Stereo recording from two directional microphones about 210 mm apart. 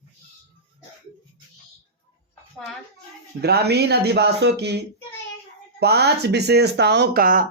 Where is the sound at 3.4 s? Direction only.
50° right (ahead or behind).